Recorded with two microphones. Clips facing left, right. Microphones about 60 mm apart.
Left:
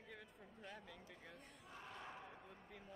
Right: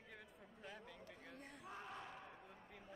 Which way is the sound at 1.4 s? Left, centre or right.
Right.